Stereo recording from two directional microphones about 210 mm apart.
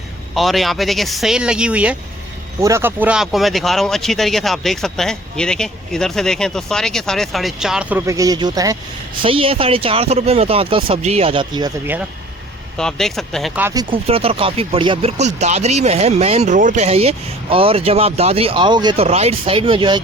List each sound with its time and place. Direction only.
0.3 s speech: centre (ahead or behind); by 11.7 s 20° right (ahead or behind)
12.7 s speech: 5° left (ahead or behind)
13.6 s speech: 10° right (ahead or behind)
13.9 s speech: 25° right (ahead or behind)